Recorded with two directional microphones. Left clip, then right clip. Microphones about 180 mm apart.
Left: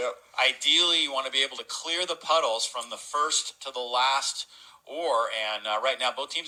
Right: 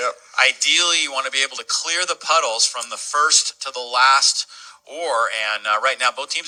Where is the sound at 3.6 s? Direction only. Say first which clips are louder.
Right 5 dB; 45° right (ahead or behind).